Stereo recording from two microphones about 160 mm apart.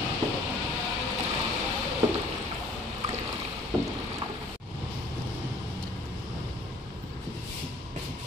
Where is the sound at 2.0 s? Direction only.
20° right (ahead or behind).